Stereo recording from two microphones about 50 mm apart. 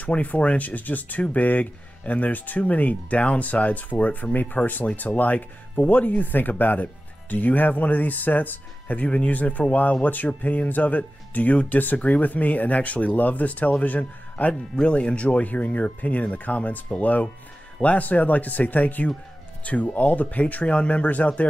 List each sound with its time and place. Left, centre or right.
0.0 s speech: left
14.5 s speech: centre